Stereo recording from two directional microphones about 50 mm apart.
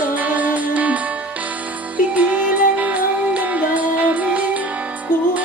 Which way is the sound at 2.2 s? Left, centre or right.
Right.